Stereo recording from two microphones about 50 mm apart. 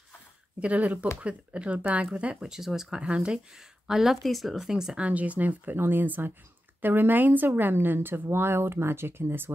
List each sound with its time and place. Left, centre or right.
0.6 s speech: right
2.5 s speech: centre
3.0 s speech: right
3.5 s speech: centre
4.9 s speech: right
5.8 s a woman's voice: right